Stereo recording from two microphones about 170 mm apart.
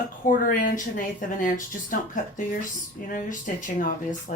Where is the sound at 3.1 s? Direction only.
50° left (ahead or behind).